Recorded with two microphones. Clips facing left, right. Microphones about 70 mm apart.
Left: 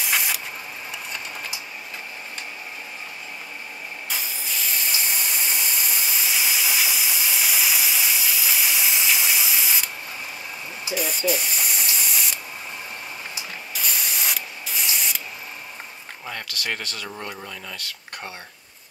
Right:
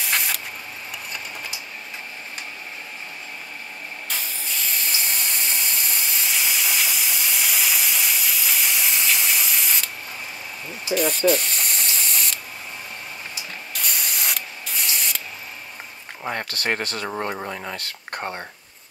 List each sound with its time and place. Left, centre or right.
0.0 s spray: centre
4.1 s spray: centre
10.9 s spray: centre
13.7 s spray: centre
16.3 s speech: right